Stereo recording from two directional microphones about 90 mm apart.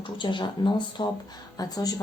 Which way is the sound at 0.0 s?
60° left (ahead or behind).